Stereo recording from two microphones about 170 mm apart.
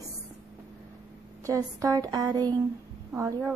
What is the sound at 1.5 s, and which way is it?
A woman's voice, 20° right (ahead or behind).